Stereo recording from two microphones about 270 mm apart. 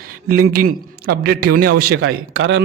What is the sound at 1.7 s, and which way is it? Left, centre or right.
Speech, right.